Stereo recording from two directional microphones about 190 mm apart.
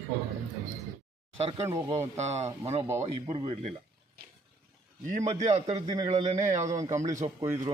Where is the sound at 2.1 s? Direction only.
35° right (ahead or behind).